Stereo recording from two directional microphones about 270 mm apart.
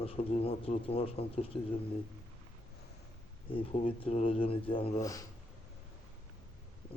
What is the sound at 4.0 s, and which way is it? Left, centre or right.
Speech, left.